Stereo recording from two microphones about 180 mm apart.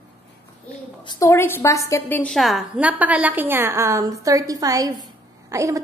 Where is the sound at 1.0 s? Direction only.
20° left (ahead or behind); by 5.7 s 15° right (ahead or behind).